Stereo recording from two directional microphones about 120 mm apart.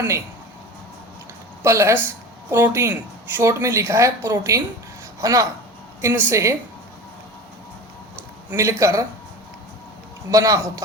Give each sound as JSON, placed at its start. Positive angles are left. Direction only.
{"t": 1.6, "sound": "speech", "side_deg": -20}
{"t": 8.4, "sound": "speech", "side_deg": -25}
{"t": 10.3, "sound": "speech", "side_deg": -25}